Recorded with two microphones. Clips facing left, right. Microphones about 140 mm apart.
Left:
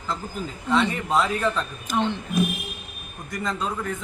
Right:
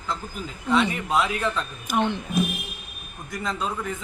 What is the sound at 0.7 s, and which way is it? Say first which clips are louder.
Speech: even; 10° right (ahead or behind).